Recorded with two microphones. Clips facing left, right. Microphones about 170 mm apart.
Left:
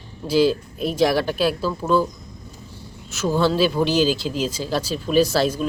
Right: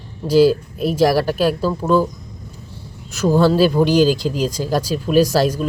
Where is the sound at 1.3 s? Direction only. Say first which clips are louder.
Right 4 dB; 45° right (ahead or behind).